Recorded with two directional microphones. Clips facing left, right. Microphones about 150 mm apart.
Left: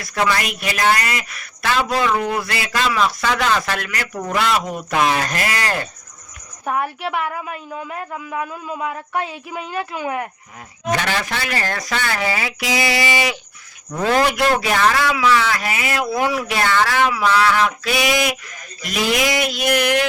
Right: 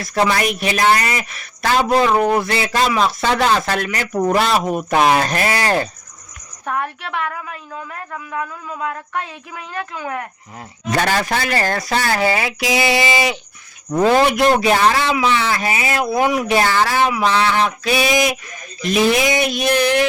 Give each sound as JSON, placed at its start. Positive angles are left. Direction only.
{"t": 0.0, "sound": "a man's voice", "side_deg": -30}
{"t": 6.7, "sound": "a woman's voice", "side_deg": 10}
{"t": 10.9, "sound": "a man's voice", "side_deg": -40}